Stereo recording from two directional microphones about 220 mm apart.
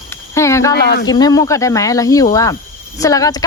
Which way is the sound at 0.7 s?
50° left (ahead or behind).